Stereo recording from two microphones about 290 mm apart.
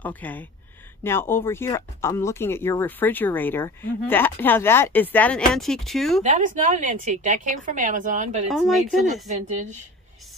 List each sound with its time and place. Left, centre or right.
0.0 s speech: centre
6.2 s a woman's voice: right
8.5 s speech: centre